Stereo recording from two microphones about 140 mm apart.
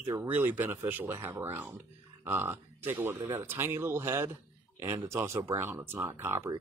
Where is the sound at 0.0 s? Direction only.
15° right (ahead or behind).